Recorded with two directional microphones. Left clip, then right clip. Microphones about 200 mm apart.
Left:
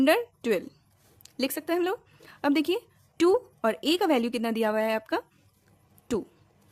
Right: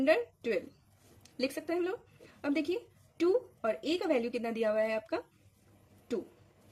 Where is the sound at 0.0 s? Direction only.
45° left (ahead or behind).